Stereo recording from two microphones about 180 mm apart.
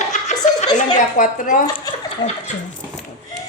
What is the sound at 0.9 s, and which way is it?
Speech, 45° left (ahead or behind).